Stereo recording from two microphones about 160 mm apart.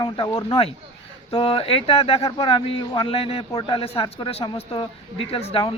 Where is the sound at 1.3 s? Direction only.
35° left (ahead or behind).